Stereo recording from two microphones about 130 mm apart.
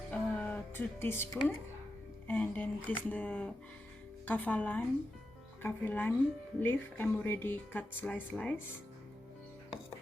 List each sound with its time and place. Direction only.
0.1 s music: 10° left (ahead or behind)
2.2 s speech: 10° left (ahead or behind)